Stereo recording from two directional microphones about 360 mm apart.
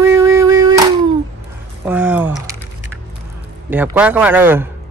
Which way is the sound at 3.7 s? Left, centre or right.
Centre.